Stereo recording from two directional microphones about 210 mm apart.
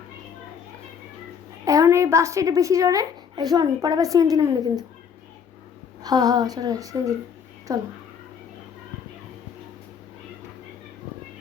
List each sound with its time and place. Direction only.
1.6 s a woman's voice: 15° right (ahead or behind)
6.0 s a woman's voice: 20° right (ahead or behind)